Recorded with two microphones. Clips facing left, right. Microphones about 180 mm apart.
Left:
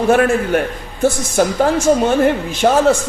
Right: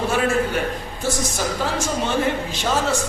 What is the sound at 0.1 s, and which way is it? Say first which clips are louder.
A man's voice: left 9 dB; 55° left (ahead or behind).